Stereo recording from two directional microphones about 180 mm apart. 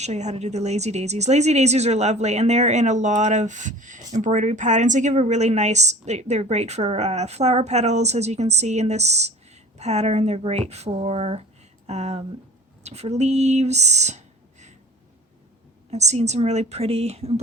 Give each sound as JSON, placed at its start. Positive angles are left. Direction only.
{"t": 0.0, "sound": "a woman's voice", "side_deg": -40}
{"t": 15.9, "sound": "a woman's voice", "side_deg": -40}